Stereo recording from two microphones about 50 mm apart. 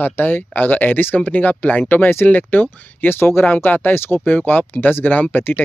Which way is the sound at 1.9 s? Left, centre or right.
Left.